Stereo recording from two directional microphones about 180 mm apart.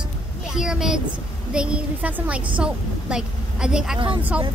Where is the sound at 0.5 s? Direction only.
5° right (ahead or behind).